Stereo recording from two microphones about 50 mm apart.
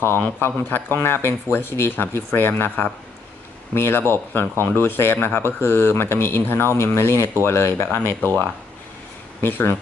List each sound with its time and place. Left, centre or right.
0.0 s speech: left
3.7 s speech: left